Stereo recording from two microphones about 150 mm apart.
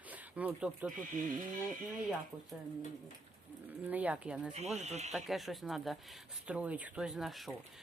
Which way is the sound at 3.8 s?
10° right (ahead or behind).